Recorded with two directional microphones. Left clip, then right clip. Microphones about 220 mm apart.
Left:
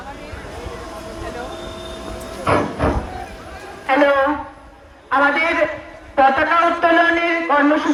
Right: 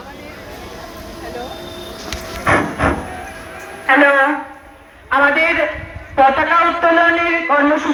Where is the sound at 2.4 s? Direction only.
Centre (ahead or behind).